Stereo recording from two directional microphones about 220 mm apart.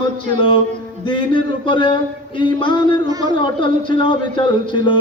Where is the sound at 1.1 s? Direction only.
20° left (ahead or behind).